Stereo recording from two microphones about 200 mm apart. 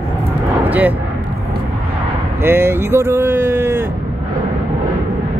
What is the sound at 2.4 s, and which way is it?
Speech, 10° right (ahead or behind).